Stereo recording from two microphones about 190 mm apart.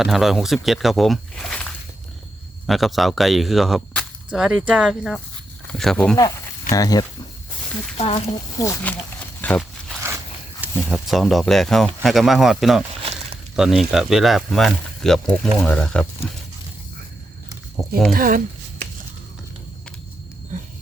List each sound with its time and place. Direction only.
0.0 s speech: centre (ahead or behind)
6.1 s speech: 20° left (ahead or behind)
7.9 s speech: 35° left (ahead or behind)
8.5 s speech: 15° left (ahead or behind)
9.4 s a sound: 5° left (ahead or behind)
10.8 s speech: centre (ahead or behind)
13.0 s a sound: 30° right (ahead or behind)
13.6 s speech: centre (ahead or behind)
17.8 s speech: centre (ahead or behind)
18.1 s a sound: 45° right (ahead or behind)